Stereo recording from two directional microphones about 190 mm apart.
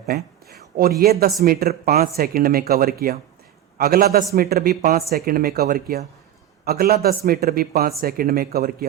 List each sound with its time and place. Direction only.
0.0 s speech: 55° right (ahead or behind)